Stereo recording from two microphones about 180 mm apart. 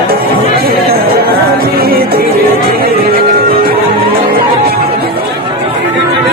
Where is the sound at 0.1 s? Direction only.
55° right (ahead or behind).